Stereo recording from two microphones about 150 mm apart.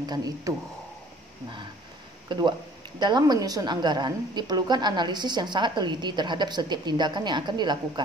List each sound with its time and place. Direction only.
0.0 s a woman's voice: 25° right (ahead or behind)
2.3 s a woman's voice: 30° right (ahead or behind)